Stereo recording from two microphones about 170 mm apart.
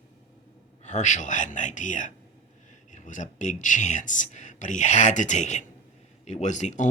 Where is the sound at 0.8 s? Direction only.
45° left (ahead or behind).